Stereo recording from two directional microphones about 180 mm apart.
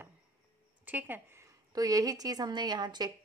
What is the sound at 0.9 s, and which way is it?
A woman's voice, 10° right (ahead or behind).